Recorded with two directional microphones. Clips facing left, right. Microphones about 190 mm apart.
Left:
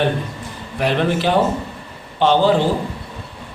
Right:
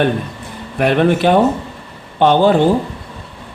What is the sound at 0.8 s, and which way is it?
Speech, 55° right (ahead or behind).